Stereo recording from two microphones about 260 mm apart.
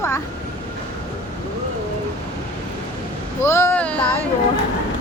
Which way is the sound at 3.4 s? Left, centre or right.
Centre.